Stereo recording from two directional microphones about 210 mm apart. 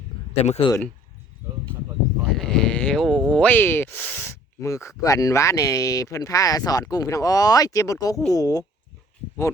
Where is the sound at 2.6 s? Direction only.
5° left (ahead or behind).